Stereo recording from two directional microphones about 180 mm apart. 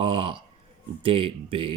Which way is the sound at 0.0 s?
30° right (ahead or behind).